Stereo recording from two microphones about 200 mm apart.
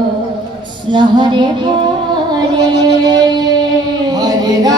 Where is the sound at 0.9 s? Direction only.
20° right (ahead or behind).